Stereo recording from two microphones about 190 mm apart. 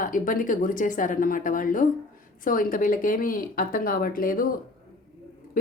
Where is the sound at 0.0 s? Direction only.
45° left (ahead or behind).